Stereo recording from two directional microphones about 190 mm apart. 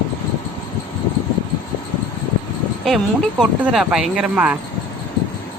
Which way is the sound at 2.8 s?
Centre (ahead or behind).